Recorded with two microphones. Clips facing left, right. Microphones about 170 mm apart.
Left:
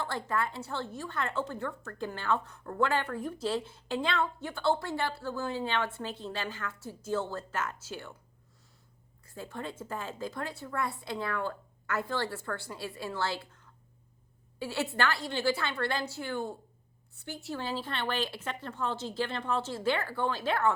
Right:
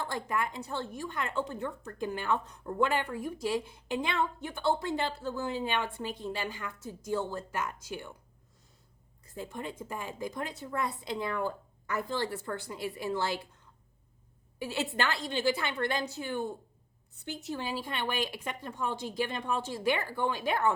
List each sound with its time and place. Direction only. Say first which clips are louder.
0.0 s a woman's voice: even; 15° right (ahead or behind)
9.2 s a woman's voice: right 1 dB; 20° right (ahead or behind)
14.6 s a woman's voice: left 1 dB; 15° right (ahead or behind)